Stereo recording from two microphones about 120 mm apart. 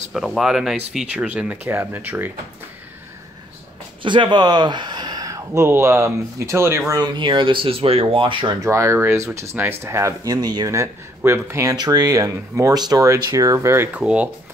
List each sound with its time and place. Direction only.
0.1 s speech: centre (ahead or behind); by 2.3 s 15° right (ahead or behind)
4.0 s speech: 45° right (ahead or behind); by 6.8 s 20° right (ahead or behind)
6.9 s speech: 40° right (ahead or behind)
8.5 s speech: 25° right (ahead or behind)
11.7 s speech: 35° right (ahead or behind)
13.9 s speech: 10° right (ahead or behind)